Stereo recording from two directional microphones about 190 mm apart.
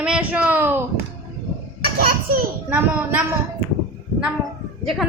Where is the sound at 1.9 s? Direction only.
50° right (ahead or behind).